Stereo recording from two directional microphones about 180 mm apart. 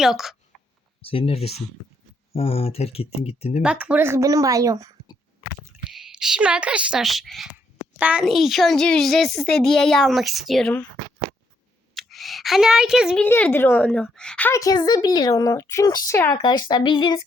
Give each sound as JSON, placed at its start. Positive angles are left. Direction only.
{"t": 0.0, "sound": "a woman's voice", "side_deg": 0}
{"t": 0.5, "sound": "a sound", "side_deg": 0}
{"t": 1.0, "sound": "speech", "side_deg": 30}
{"t": 3.6, "sound": "a woman's voice", "side_deg": -5}
{"t": 5.9, "sound": "a woman's voice", "side_deg": -5}
{"t": 11.9, "sound": "a sound", "side_deg": 0}
{"t": 13.2, "sound": "a woman's voice", "side_deg": 10}